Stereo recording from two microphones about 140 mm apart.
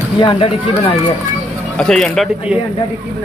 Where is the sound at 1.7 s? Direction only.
5° left (ahead or behind).